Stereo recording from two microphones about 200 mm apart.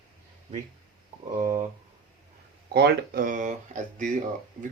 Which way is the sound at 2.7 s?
55° right (ahead or behind).